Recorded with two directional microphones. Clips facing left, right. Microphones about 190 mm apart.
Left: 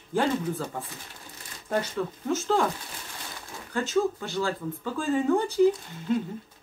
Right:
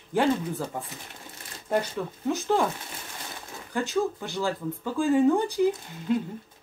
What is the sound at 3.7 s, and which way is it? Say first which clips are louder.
Speech: left 1 dB; 15° right (ahead or behind).